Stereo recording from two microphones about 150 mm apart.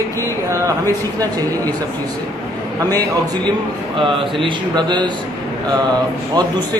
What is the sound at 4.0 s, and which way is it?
Speech, 35° right (ahead or behind).